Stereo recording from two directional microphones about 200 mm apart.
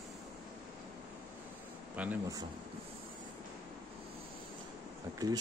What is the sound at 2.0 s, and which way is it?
Speech, 10° right (ahead or behind).